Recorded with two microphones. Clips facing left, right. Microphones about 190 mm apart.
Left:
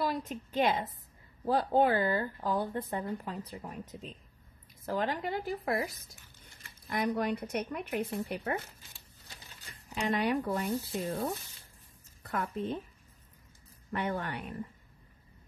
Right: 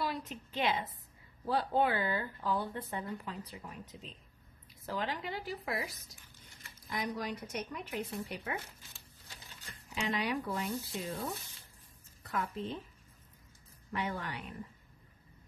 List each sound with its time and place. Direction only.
0.0 s a woman's voice: 45° left (ahead or behind)
10.0 s a woman's voice: 50° left (ahead or behind)
13.9 s speech: 50° left (ahead or behind)